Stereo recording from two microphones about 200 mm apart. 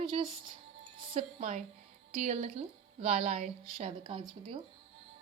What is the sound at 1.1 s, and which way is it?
A woman's voice, 40° right (ahead or behind).